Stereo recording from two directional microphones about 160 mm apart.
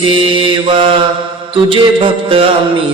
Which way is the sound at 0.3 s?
30° right (ahead or behind).